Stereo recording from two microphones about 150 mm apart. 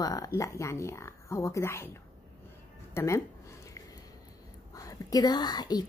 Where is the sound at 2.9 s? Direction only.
20° left (ahead or behind).